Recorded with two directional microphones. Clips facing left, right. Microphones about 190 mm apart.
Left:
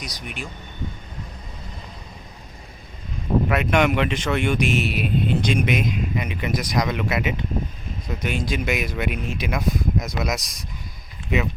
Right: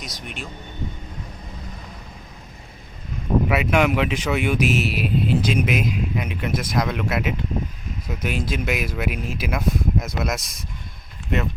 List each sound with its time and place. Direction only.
0.0 s speech: centre (ahead or behind)
3.5 s speech: 5° right (ahead or behind)